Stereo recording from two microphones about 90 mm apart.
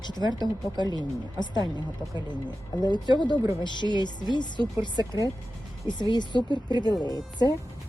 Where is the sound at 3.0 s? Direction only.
55° right (ahead or behind).